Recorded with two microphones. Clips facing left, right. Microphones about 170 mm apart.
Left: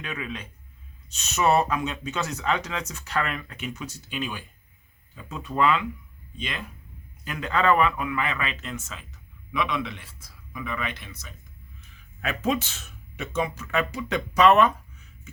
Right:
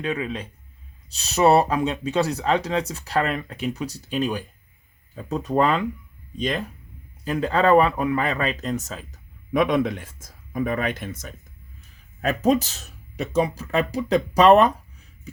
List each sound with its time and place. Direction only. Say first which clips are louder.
0.0 s speech: right 7 dB; 35° right (ahead or behind); by 11.3 s 50° right (ahead or behind)
12.2 s speech: right 6 dB; 40° right (ahead or behind)